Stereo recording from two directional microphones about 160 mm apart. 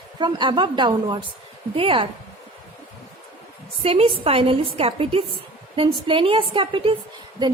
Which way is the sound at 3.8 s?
35° right (ahead or behind).